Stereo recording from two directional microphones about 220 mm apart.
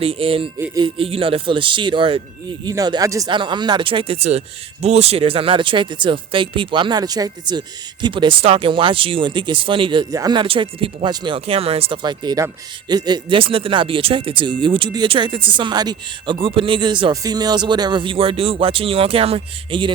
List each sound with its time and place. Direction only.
0.0 s speech: 25° right (ahead or behind)